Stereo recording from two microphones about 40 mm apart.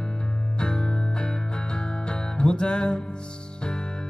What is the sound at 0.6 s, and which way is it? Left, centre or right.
Music, left.